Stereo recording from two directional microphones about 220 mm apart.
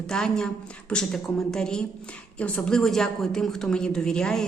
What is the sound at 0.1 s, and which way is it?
A woman's voice, 5° left (ahead or behind).